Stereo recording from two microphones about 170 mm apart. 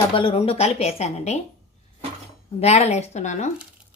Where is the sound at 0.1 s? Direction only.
30° left (ahead or behind).